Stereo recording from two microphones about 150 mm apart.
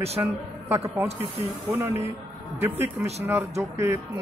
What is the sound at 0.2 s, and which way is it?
A woman's voice, 20° right (ahead or behind).